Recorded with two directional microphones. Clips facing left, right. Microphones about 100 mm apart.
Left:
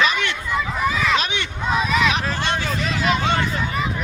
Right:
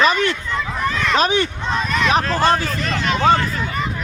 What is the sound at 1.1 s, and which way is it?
Speech, 40° right (ahead or behind).